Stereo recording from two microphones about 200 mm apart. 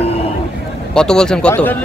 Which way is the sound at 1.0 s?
5° left (ahead or behind).